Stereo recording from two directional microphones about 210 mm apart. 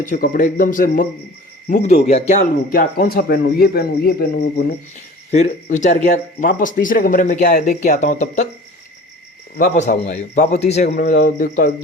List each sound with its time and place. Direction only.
0.0 s speech: 40° left (ahead or behind)
5.3 s speech: 35° left (ahead or behind)
9.7 s speech: 35° left (ahead or behind)